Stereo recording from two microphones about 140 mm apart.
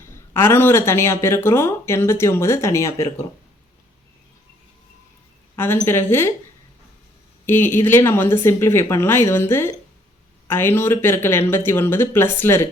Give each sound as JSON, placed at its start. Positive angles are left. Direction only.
{"t": 0.1, "sound": "speech", "side_deg": 15}
{"t": 5.5, "sound": "speech", "side_deg": 15}
{"t": 7.4, "sound": "speech", "side_deg": 15}